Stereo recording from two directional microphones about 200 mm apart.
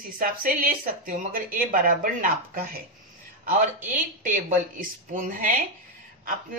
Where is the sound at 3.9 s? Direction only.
40° right (ahead or behind).